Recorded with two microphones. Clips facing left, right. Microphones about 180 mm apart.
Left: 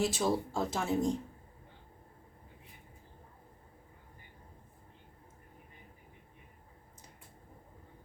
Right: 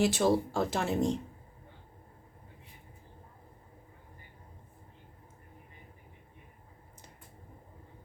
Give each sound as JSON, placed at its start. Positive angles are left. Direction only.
{"t": 0.0, "sound": "speech", "side_deg": -65}